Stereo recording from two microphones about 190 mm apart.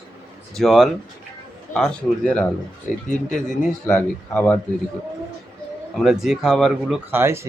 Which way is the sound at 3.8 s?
5° left (ahead or behind).